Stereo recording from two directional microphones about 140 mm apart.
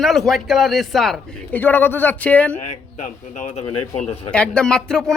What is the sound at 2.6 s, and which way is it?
Speech, 60° left (ahead or behind).